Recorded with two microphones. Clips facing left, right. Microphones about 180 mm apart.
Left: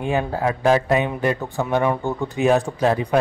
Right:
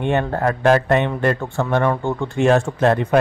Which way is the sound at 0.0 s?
5° left (ahead or behind).